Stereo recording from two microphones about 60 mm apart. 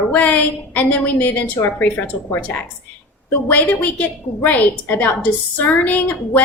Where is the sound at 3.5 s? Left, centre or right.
Left.